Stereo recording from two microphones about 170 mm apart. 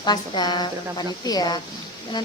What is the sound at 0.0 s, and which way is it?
Speech, 25° left (ahead or behind).